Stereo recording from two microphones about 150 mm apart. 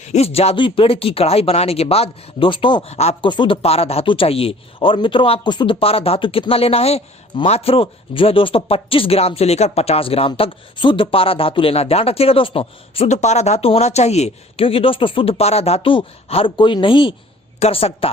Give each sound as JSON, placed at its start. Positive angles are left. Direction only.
{"t": 0.1, "sound": "speech", "side_deg": 45}
{"t": 3.2, "sound": "speech", "side_deg": 30}